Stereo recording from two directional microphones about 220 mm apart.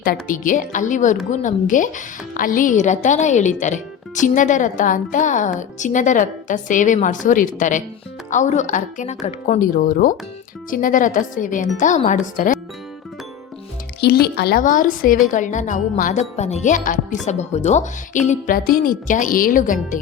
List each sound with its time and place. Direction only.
0.0 s speech: 40° left (ahead or behind)
14.0 s speech: 50° left (ahead or behind)